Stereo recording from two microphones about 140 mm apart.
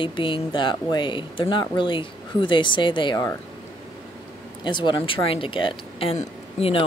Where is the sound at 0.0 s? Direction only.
35° left (ahead or behind).